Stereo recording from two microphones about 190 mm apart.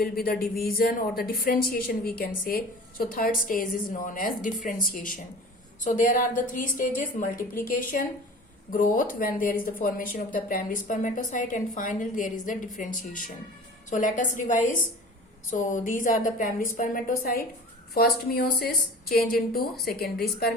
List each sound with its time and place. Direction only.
0.0 s a woman's voice: 55° left (ahead or behind)